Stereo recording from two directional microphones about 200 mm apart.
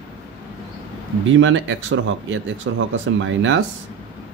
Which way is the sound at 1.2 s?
70° right (ahead or behind).